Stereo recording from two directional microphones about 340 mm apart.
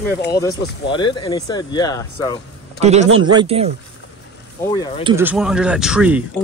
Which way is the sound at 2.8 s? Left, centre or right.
Centre.